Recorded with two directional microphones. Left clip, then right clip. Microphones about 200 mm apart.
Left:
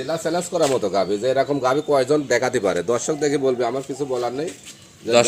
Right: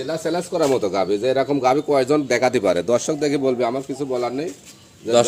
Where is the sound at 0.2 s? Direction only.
25° right (ahead or behind).